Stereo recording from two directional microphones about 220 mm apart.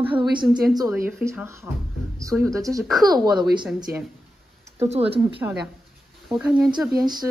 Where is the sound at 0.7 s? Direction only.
10° right (ahead or behind).